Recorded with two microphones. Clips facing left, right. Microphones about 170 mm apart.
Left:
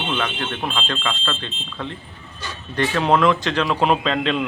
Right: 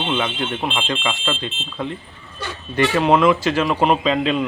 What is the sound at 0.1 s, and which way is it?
A man's voice, 10° right (ahead or behind).